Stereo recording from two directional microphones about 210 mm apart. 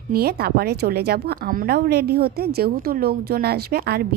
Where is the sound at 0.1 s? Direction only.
45° right (ahead or behind).